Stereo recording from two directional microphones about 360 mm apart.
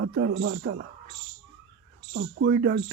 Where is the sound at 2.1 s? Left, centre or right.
Right.